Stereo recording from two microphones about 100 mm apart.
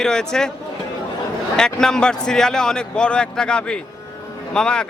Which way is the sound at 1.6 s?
5° left (ahead or behind).